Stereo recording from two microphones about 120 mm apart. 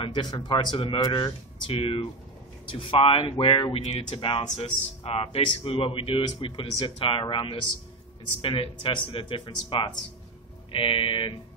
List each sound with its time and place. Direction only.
0.0 s speech: 40° left (ahead or behind)